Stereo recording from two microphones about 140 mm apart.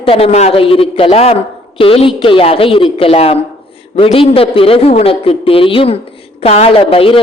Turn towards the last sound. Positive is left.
turn(degrees=40)  # may be behind; listen again after turning